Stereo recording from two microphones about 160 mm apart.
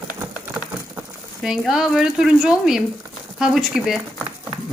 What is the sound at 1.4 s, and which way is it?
A woman's voice, centre (ahead or behind).